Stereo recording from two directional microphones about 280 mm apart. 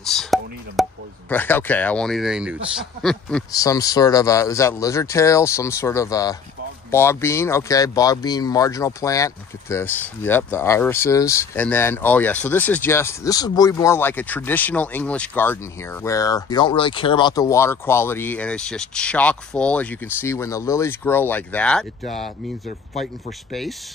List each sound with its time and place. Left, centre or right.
0.0 s a sound: centre
1.3 s speech: centre
22.7 s speech: left